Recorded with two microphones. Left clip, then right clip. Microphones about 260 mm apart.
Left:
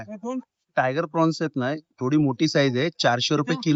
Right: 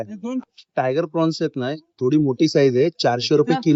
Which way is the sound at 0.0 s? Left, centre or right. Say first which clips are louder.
Right 4 dB; centre.